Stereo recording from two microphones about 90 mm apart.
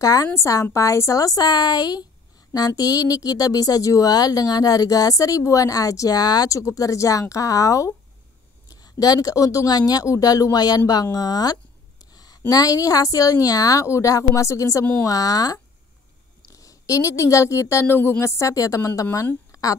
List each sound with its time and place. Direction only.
0.0 s a woman's voice: 45° left (ahead or behind); by 18.1 s 25° left (ahead or behind)
18.2 s speech: 35° left (ahead or behind)
19.5 s a sound: 40° left (ahead or behind)